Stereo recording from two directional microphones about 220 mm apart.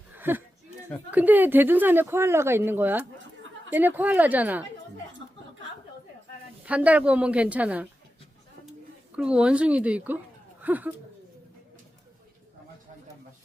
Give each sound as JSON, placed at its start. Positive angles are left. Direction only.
{"t": 0.2, "sound": "speech", "side_deg": -10}
{"t": 5.2, "sound": "a sound", "side_deg": 25}
{"t": 6.7, "sound": "a woman's voice", "side_deg": -5}
{"t": 9.1, "sound": "a woman's voice", "side_deg": -5}